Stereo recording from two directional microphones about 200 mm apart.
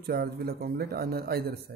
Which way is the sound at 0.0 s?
50° right (ahead or behind).